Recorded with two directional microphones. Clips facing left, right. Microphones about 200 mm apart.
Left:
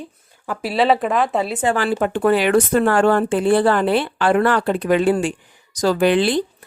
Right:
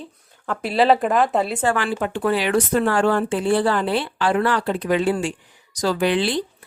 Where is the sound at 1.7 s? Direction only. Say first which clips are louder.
Left 4 dB; 40° left (ahead or behind).